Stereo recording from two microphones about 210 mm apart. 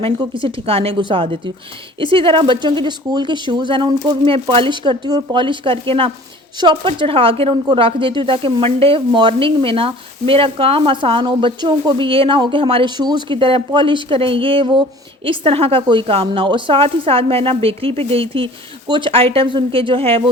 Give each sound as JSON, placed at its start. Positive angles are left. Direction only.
{"t": 0.0, "sound": "a woman's voice", "side_deg": -25}